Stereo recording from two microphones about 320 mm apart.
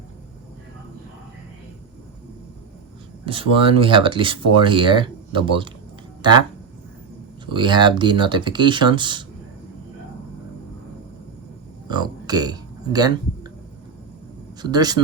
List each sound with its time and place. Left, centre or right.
3.2 s speech: centre
7.4 s speech: centre
11.9 s a sound: centre
14.6 s speech: centre